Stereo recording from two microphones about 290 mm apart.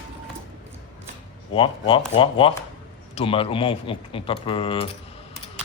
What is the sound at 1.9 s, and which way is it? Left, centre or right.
Speech, centre.